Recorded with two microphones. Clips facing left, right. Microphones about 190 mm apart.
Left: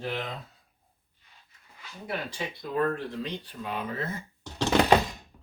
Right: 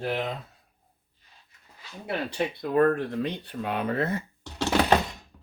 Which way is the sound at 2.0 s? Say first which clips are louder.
Right 5 dB; 60° right (ahead or behind).